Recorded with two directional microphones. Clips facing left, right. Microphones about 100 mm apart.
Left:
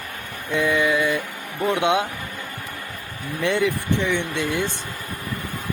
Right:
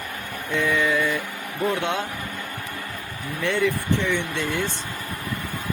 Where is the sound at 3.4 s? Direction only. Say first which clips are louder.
Left 1 dB; 15° left (ahead or behind).